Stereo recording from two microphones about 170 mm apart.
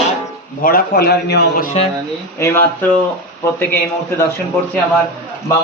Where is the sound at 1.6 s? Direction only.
45° left (ahead or behind).